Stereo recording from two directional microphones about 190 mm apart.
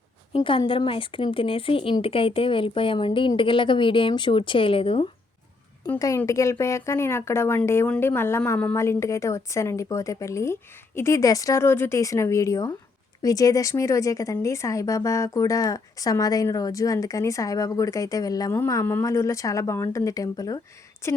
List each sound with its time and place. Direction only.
0.3 s speech: 25° left (ahead or behind)
5.8 s speech: 15° left (ahead or behind)